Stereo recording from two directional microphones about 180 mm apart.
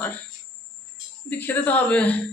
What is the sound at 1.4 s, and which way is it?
Speech, 10° left (ahead or behind).